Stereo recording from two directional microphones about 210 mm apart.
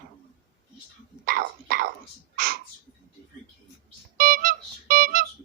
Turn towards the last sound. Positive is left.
turn(degrees=-45)  # may be behind; listen again after turning